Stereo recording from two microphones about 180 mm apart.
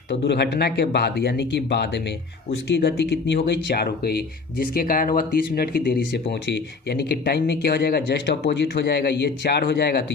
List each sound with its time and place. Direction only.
0.1 s speech: 70° left (ahead or behind)